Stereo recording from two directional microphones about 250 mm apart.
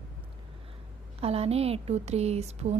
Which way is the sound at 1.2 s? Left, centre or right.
Right.